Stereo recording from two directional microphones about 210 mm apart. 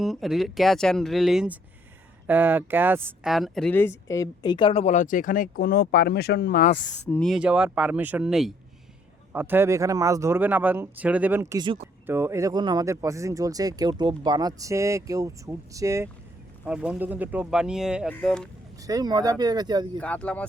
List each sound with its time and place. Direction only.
0.0 s speech: centre (ahead or behind); by 6.7 s 40° left (ahead or behind)
7.1 s speech: centre (ahead or behind); by 11.9 s 25° right (ahead or behind)
12.0 s speech: 10° right (ahead or behind)
16.6 s speech: 5° right (ahead or behind)
18.8 s speech: 15° right (ahead or behind)
20.0 s speech: 5° left (ahead or behind)